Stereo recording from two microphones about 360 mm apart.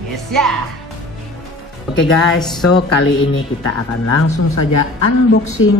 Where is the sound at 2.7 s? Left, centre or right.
Left.